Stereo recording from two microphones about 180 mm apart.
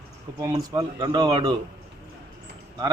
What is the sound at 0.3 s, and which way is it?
A man's voice, 20° right (ahead or behind).